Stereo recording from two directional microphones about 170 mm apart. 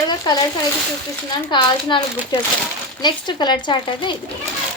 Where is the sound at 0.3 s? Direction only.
25° left (ahead or behind).